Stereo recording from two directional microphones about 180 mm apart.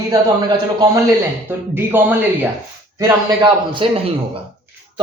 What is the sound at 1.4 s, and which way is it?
Speech, 10° right (ahead or behind).